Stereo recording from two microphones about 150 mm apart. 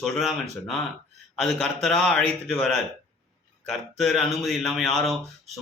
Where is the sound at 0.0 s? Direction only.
Centre (ahead or behind).